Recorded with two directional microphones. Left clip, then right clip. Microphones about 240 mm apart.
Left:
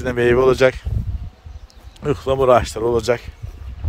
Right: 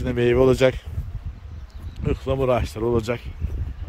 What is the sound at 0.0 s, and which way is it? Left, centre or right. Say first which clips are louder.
Speech: left 4 dB; centre.